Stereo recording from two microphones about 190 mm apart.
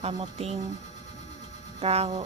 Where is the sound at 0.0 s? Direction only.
35° right (ahead or behind).